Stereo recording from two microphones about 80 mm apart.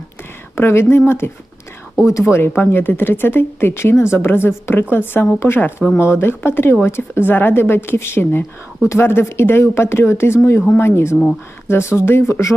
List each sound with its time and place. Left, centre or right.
0.5 s speech: left